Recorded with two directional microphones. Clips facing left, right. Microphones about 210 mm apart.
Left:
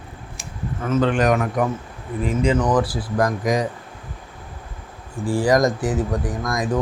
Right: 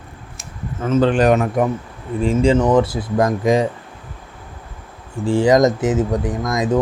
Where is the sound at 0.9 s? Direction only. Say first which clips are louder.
Right 4 dB; 30° right (ahead or behind).